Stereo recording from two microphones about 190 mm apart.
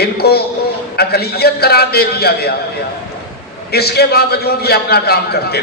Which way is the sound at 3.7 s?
55° left (ahead or behind).